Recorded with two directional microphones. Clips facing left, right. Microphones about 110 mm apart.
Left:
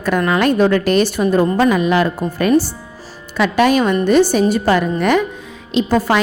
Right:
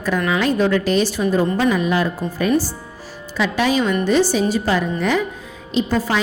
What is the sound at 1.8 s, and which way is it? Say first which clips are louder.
Speech: left 4 dB; 75° left (ahead or behind).